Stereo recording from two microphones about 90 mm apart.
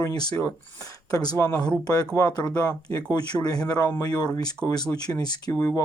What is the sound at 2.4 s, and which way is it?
Speech, 15° left (ahead or behind).